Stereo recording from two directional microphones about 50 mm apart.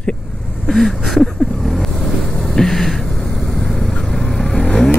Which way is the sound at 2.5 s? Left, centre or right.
Centre.